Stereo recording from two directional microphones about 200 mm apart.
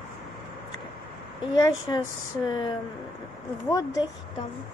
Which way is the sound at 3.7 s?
20° left (ahead or behind).